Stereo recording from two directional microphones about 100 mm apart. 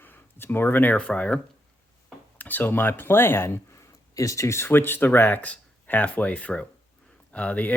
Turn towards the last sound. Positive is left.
turn(degrees=15)  # may be behind; listen again after turning